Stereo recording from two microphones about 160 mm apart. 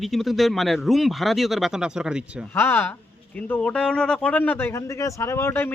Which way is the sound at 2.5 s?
15° left (ahead or behind).